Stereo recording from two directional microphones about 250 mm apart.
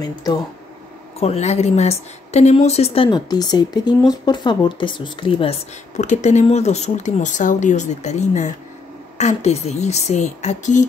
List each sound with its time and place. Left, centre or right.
0.0 s a woman's voice: centre